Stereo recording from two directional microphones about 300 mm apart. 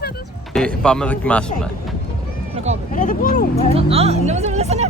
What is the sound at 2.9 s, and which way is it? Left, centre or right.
Speech, left.